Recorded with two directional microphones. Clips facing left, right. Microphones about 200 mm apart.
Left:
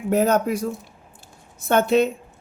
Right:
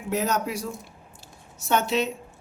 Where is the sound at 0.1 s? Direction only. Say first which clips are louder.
Left 7 dB; 55° left (ahead or behind).